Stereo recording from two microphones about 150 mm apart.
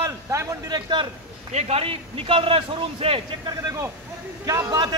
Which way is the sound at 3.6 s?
20° right (ahead or behind).